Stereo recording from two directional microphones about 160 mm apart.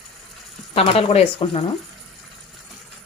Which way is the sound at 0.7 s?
35° left (ahead or behind).